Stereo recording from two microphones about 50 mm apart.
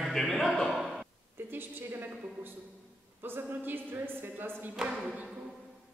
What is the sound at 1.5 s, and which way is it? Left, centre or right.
Speech, right.